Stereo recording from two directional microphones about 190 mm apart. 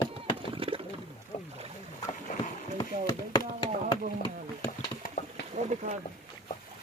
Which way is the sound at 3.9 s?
20° left (ahead or behind).